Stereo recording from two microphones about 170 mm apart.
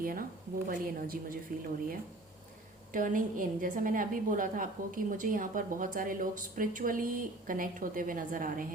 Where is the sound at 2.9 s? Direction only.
50° right (ahead or behind).